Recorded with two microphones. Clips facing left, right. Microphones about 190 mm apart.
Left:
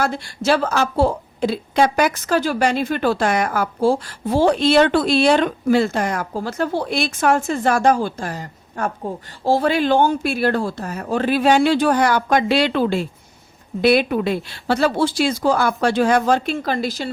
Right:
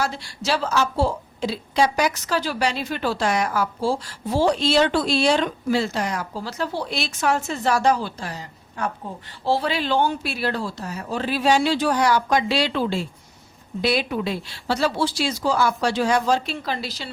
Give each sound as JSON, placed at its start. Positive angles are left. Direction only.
{"t": 0.0, "sound": "a woman's voice", "side_deg": 55}